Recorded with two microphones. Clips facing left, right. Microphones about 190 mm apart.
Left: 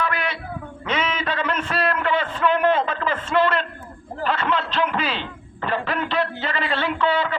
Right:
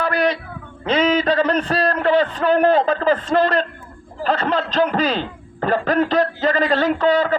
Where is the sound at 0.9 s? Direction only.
35° right (ahead or behind).